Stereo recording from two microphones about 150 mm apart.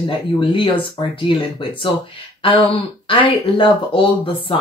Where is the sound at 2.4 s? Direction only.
35° left (ahead or behind).